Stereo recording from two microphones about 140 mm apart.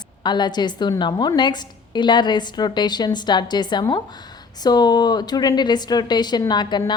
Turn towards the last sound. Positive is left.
turn(degrees=30)  # may be behind; listen again after turning